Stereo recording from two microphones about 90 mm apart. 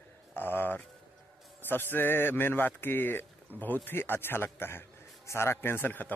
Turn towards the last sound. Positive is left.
turn(degrees=20)  # may be behind; listen again after turning